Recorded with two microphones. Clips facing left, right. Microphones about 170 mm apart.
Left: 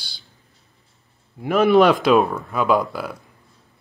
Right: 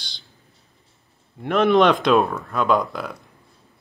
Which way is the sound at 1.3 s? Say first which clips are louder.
Left 2 dB; 5° left (ahead or behind).